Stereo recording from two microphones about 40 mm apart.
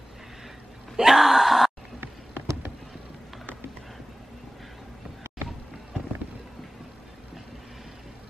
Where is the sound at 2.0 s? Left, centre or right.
Right.